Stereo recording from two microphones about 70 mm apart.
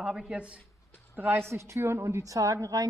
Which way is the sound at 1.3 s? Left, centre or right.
Right.